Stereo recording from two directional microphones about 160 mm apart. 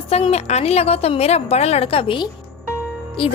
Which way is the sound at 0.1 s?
40° left (ahead or behind).